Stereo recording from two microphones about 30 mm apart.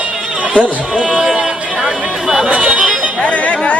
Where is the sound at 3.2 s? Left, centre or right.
Left.